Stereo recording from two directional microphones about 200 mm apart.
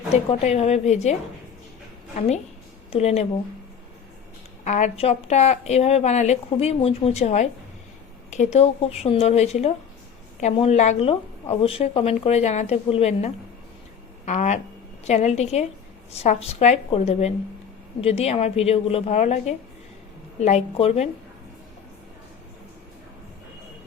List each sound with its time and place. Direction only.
0.1 s speech: 35° left (ahead or behind)
2.1 s speech: 35° left (ahead or behind)
4.6 s speech: 35° left (ahead or behind)